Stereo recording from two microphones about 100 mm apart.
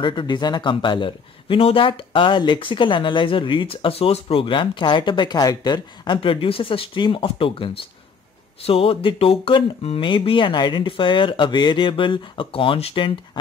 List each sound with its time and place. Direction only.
0.0 s speech: 50° left (ahead or behind)